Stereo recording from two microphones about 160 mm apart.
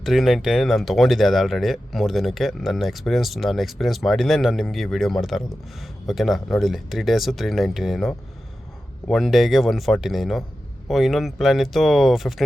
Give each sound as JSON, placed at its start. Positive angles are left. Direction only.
{"t": 0.0, "sound": "speech", "side_deg": 0}